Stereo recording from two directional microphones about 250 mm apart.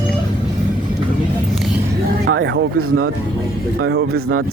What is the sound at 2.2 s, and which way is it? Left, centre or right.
Speech, right.